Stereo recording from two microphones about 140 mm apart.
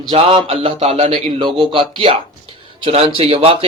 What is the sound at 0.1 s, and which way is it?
Speech, 40° right (ahead or behind).